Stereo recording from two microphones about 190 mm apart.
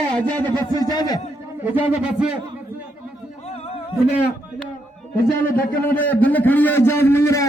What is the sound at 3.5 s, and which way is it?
Music, 35° left (ahead or behind).